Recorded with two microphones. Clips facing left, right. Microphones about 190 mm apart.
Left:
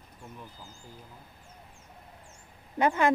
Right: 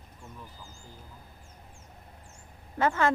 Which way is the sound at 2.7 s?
15° left (ahead or behind).